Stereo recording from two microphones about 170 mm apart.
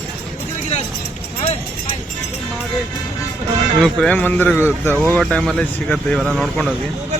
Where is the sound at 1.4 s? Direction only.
30° left (ahead or behind).